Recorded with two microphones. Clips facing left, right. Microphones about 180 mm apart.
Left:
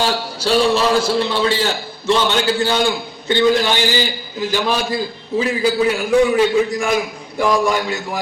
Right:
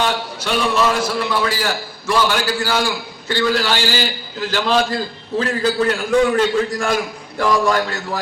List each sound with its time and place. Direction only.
0.0 s a man's voice: 30° left (ahead or behind); by 8.2 s 10° left (ahead or behind)